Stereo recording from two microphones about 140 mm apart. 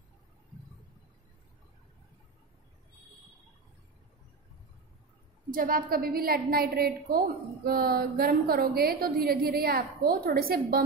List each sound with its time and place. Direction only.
5.5 s a woman's voice: 85° right